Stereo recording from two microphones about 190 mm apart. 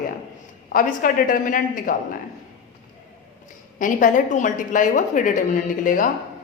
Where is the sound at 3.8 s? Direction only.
45° left (ahead or behind).